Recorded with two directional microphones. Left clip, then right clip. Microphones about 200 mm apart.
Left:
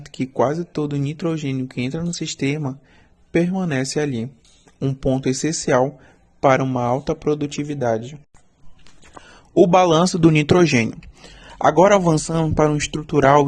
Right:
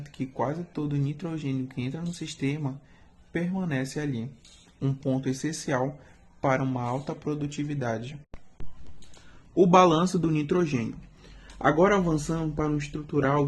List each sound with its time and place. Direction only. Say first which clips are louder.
0.0 s speech: left 11 dB; 50° left (ahead or behind)
4.8 s speech: left 9 dB; 40° left (ahead or behind)
9.6 s speech: left 6 dB; 45° left (ahead or behind)
11.6 s speech: left 9 dB; 65° left (ahead or behind)